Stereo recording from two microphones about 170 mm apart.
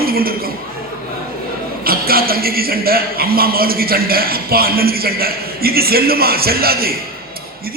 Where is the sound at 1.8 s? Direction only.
60° right (ahead or behind).